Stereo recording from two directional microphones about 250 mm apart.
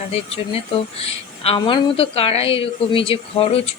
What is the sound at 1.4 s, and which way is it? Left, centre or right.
A woman's voice, left.